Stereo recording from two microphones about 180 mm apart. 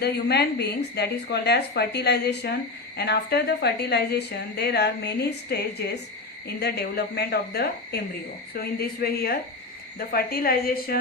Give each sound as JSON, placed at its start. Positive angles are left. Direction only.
{"t": 0.0, "sound": "a woman's voice", "side_deg": 65}